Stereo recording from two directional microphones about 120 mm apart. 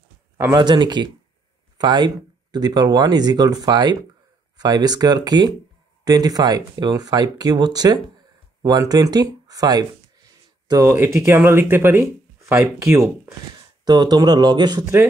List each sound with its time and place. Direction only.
0.6 s speech: 40° right (ahead or behind); by 13.0 s 25° right (ahead or behind)
13.8 s speech: 35° right (ahead or behind)